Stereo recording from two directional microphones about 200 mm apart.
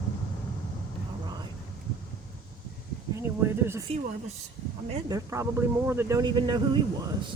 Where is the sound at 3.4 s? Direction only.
10° right (ahead or behind).